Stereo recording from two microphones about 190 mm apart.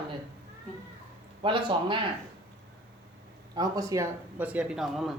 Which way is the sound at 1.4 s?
25° right (ahead or behind).